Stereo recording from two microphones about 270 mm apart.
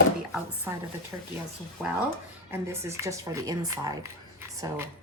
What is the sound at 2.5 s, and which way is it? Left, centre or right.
Speech, centre.